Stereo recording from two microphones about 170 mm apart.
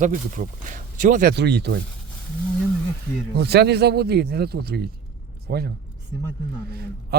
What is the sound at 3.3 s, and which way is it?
A man's voice, 75° right (ahead or behind).